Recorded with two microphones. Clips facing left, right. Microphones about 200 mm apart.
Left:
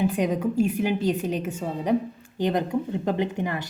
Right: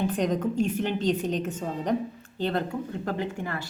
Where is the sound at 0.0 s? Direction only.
10° left (ahead or behind).